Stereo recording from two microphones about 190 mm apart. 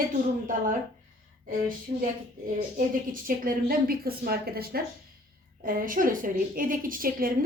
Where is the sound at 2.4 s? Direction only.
45° right (ahead or behind).